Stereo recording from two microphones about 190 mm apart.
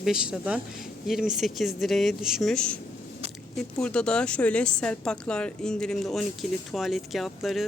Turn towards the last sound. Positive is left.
turn(degrees=0)  # may be behind; listen again after turning